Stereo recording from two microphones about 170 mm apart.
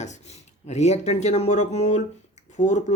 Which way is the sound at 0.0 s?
40° left (ahead or behind).